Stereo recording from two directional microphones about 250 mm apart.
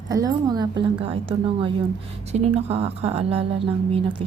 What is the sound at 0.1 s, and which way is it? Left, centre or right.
A woman's voice, centre.